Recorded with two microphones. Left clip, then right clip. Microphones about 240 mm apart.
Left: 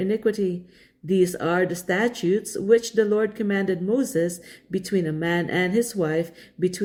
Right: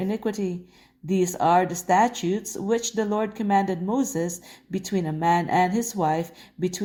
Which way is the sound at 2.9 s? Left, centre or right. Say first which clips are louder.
Left 5 dB; right.